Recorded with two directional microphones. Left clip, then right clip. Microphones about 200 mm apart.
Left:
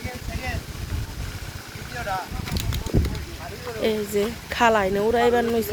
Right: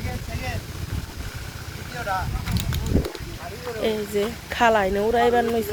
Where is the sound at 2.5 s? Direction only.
Centre (ahead or behind).